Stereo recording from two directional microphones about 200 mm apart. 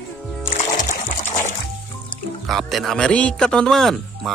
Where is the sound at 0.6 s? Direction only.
40° left (ahead or behind).